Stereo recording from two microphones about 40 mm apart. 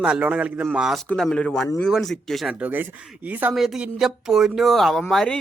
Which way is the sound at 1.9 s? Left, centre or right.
Centre.